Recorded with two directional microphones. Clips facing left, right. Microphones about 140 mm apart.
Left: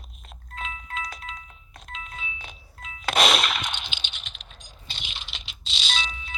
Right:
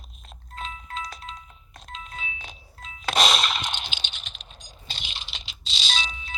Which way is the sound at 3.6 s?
35° right (ahead or behind).